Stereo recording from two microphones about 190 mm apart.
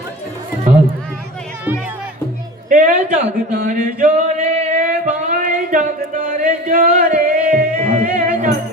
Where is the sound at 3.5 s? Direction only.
50° right (ahead or behind).